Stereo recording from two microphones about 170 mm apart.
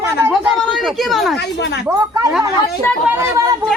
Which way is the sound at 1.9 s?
20° right (ahead or behind).